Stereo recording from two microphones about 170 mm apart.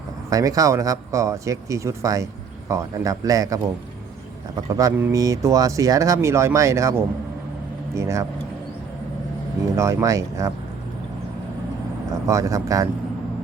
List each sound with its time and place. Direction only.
0.3 s speech: 20° right (ahead or behind)
9.7 s speech: 20° right (ahead or behind)
12.3 s speech: 20° right (ahead or behind)